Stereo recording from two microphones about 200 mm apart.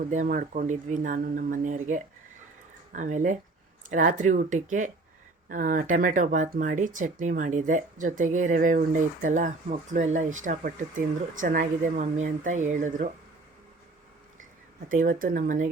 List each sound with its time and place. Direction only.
0.1 s speech: 40° right (ahead or behind)
14.8 s speech: 45° right (ahead or behind)